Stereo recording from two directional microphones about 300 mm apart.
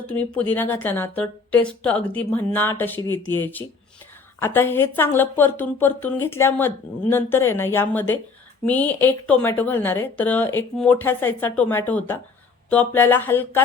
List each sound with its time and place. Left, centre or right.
0.1 s speech: centre